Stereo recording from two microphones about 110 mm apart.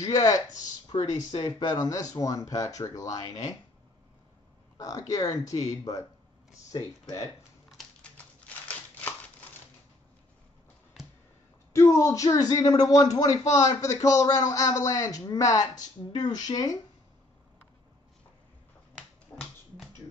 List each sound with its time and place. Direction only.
0.0 s speech: 30° left (ahead or behind)
0.8 s speech: 45° left (ahead or behind)
4.7 s speech: 30° left (ahead or behind)
7.7 s crumpling: 10° left (ahead or behind)
11.0 s a sound: centre (ahead or behind)
11.7 s speech: 25° left (ahead or behind)
19.3 s dog: 5° left (ahead or behind)